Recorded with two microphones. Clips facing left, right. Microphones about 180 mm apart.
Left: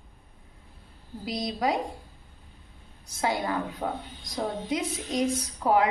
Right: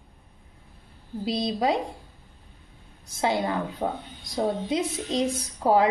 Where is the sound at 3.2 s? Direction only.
25° right (ahead or behind).